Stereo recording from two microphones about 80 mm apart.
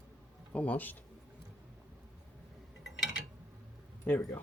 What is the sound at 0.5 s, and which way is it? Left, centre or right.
Speech, centre.